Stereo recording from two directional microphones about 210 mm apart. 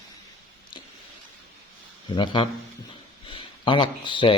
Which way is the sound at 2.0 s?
20° left (ahead or behind).